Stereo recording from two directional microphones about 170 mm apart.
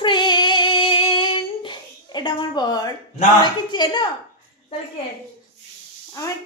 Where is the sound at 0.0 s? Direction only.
25° left (ahead or behind).